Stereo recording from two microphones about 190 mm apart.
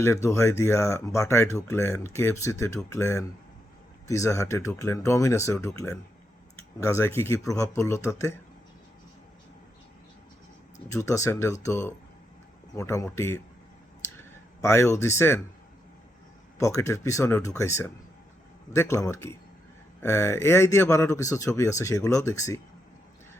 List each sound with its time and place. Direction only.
0.0 s speech: 15° left (ahead or behind)
10.8 s speech: 15° left (ahead or behind)
14.6 s speech: 15° left (ahead or behind)
16.6 s speech: 15° left (ahead or behind)